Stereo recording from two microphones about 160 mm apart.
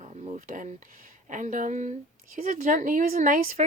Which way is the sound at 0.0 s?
50° right (ahead or behind).